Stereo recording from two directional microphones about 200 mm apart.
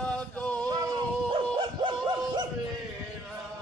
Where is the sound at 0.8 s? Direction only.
20° right (ahead or behind).